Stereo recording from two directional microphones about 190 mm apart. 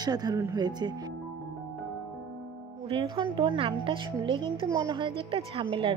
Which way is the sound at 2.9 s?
30° right (ahead or behind).